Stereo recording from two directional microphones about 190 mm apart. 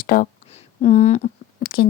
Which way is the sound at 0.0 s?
45° left (ahead or behind).